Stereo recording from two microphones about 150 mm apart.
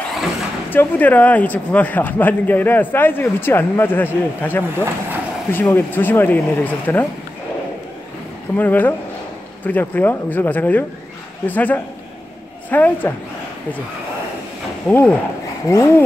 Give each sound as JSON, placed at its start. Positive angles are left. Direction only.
{"t": 0.7, "sound": "speech", "side_deg": 10}
{"t": 8.5, "sound": "speech", "side_deg": 10}
{"t": 14.9, "sound": "speech", "side_deg": 10}